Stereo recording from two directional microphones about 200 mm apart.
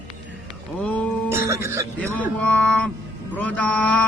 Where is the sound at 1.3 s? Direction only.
15° right (ahead or behind).